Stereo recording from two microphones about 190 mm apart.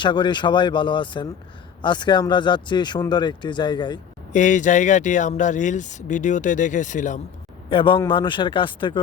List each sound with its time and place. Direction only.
0.0 s speech: 25° left (ahead or behind)
4.3 s speech: 40° left (ahead or behind)
7.7 s speech: 25° left (ahead or behind)